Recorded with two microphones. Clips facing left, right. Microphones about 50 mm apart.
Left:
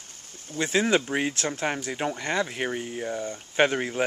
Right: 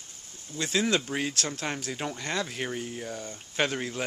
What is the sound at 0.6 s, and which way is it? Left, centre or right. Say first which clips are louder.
Speech: left 4 dB; left.